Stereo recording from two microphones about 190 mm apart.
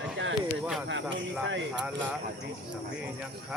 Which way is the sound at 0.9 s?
75° right (ahead or behind).